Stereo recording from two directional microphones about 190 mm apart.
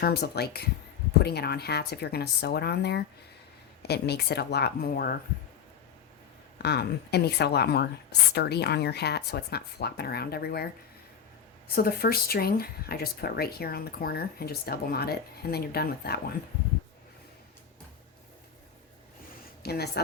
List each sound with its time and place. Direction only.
0.0 s speech: 55° left (ahead or behind)
6.6 s speech: 60° left (ahead or behind)
11.7 s speech: 55° left (ahead or behind)
19.6 s speech: 55° left (ahead or behind)